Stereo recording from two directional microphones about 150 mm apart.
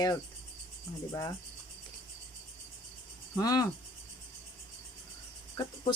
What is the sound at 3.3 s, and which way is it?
Speech, 25° left (ahead or behind).